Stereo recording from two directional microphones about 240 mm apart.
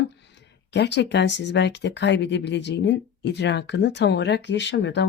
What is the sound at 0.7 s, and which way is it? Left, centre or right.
Speech, left.